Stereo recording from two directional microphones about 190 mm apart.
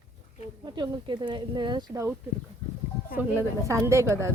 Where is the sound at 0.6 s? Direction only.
20° right (ahead or behind).